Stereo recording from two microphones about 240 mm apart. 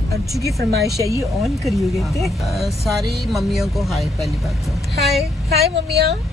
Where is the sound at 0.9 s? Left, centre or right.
Centre.